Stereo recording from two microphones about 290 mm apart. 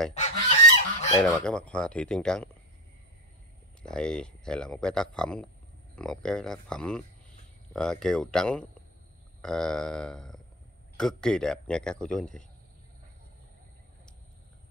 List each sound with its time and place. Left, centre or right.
0.1 s goose: left
1.2 s speech: centre
3.8 s speech: centre